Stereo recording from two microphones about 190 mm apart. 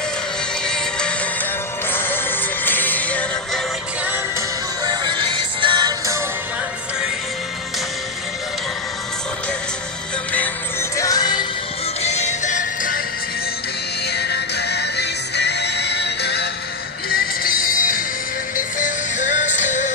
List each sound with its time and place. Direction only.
0.7 s music: 5° left (ahead or behind)
4.8 s music: 25° right (ahead or behind)
10.3 s music: 10° left (ahead or behind)
12.0 s music: 35° left (ahead or behind)
14.1 s music: 60° left (ahead or behind)
17.1 s music: 50° left (ahead or behind)